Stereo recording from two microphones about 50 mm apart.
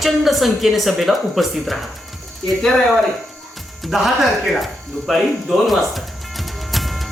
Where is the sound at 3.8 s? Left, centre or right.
Centre.